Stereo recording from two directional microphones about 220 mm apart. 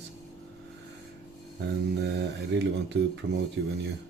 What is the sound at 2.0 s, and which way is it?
Mantra, 50° right (ahead or behind).